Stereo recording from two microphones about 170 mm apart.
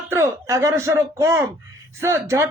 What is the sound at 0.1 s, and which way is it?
A man's voice, 15° right (ahead or behind).